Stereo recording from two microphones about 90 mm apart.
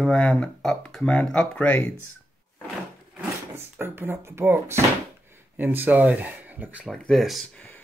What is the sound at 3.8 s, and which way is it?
Speech, 25° right (ahead or behind).